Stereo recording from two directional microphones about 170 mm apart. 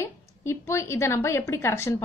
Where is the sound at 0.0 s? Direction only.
15° left (ahead or behind).